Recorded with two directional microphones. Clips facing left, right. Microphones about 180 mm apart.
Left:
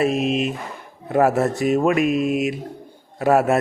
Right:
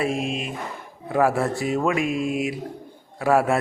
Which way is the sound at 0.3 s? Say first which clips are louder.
Left 8 dB; 75° left (ahead or behind).